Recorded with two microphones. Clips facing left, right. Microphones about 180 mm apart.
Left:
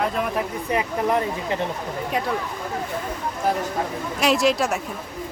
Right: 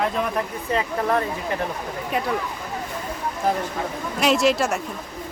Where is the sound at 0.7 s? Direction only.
15° left (ahead or behind).